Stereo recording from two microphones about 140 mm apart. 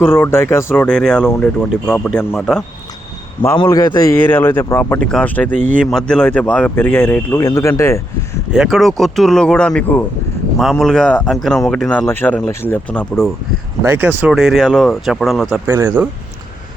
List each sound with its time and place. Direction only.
0.0 s speech: 15° left (ahead or behind)
3.6 s speech: 30° left (ahead or behind)
4.9 s speech: 5° left (ahead or behind)
5.5 s speech: 55° right (ahead or behind)
5.8 s speech: 5° left (ahead or behind)
7.3 s speech: 20° left (ahead or behind)
8.5 s speech: centre (ahead or behind)
12.2 s speech: 10° left (ahead or behind)
13.8 s speech: 15° right (ahead or behind)
15.6 s speech: 15° right (ahead or behind)